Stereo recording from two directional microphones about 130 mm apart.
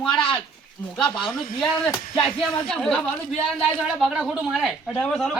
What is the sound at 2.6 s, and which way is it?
A woman's voice, 5° left (ahead or behind).